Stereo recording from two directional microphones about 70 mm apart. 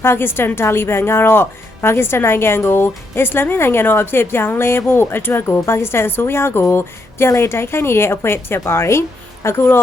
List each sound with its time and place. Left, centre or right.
0.0 s a woman's voice: left